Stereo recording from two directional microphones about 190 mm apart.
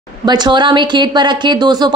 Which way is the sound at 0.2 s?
20° right (ahead or behind).